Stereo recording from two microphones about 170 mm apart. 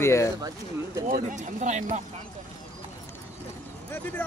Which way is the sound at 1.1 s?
50° right (ahead or behind).